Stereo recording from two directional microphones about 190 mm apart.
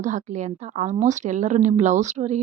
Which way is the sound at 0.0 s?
40° right (ahead or behind).